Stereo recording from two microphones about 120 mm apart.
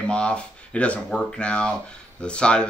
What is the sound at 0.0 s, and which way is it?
Speech, 10° left (ahead or behind).